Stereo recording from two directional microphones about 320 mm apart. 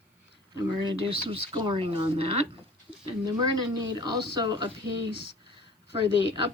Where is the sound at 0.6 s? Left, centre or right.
Centre.